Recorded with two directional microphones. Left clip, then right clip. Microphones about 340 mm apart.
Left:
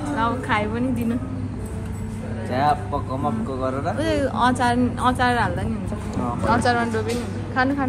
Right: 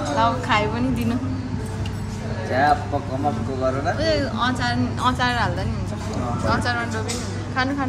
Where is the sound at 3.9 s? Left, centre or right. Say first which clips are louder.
Even; centre.